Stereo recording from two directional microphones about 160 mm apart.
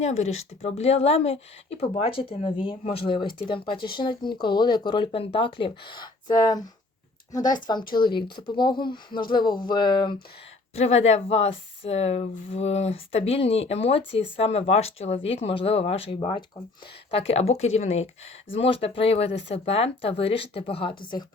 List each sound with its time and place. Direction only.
0.0 s speech: 45° left (ahead or behind)
10.8 s speech: 40° left (ahead or behind)